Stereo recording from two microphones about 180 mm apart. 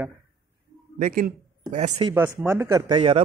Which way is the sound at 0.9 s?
50° right (ahead or behind).